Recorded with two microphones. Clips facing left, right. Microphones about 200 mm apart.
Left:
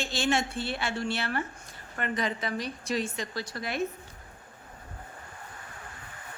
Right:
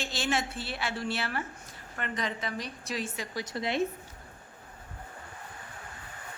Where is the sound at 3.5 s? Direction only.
25° right (ahead or behind).